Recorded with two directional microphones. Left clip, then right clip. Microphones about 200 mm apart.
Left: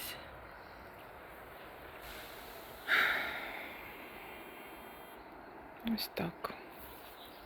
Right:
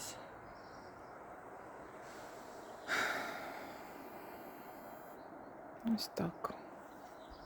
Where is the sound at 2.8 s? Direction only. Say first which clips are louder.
Left 6 dB; 15° right (ahead or behind).